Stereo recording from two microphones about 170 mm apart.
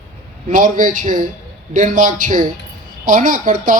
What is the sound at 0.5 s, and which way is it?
Speech, 50° right (ahead or behind).